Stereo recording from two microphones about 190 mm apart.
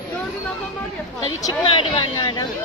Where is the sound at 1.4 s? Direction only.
25° left (ahead or behind).